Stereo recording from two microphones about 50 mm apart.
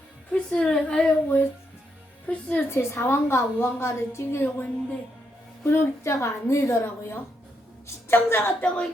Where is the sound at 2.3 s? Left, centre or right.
Left.